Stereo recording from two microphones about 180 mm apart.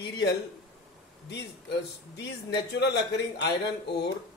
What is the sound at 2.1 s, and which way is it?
A man's voice, 70° left (ahead or behind).